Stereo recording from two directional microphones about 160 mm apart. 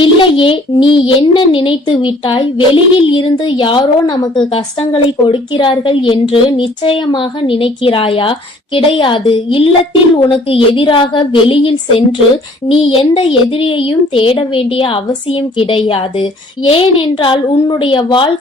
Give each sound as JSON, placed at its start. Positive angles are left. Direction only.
{"t": 0.0, "sound": "speech", "side_deg": 35}
{"t": 5.3, "sound": "speech", "side_deg": 30}